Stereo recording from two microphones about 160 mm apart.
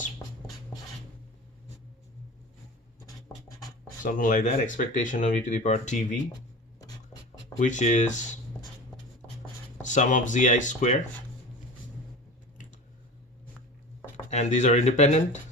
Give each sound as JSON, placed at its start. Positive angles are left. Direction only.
{"t": 4.0, "sound": "speech", "side_deg": 55}
{"t": 6.7, "sound": "scratch", "side_deg": 25}
{"t": 7.6, "sound": "speech", "side_deg": 50}
{"t": 9.9, "sound": "speech", "side_deg": 50}
{"t": 14.3, "sound": "speech", "side_deg": 45}